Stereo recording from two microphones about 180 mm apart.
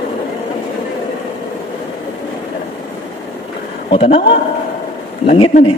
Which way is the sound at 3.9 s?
30° left (ahead or behind).